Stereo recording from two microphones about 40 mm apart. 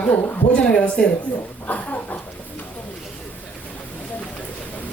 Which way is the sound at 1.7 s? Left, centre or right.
Left.